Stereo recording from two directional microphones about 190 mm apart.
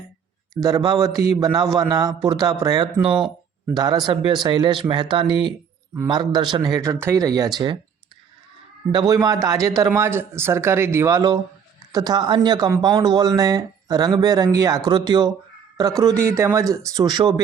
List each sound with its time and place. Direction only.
0.6 s speech: 20° right (ahead or behind)
8.9 s speech: 20° right (ahead or behind)